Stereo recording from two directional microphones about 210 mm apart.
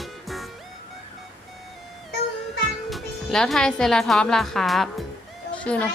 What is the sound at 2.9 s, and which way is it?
A woman's voice, centre (ahead or behind).